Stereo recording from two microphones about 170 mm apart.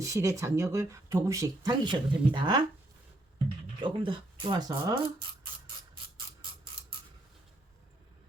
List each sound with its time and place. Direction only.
0.0 s speech: 15° right (ahead or behind)
3.8 s speech: 30° right (ahead or behind)